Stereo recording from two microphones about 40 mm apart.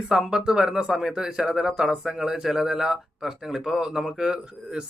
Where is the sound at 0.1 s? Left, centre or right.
Centre.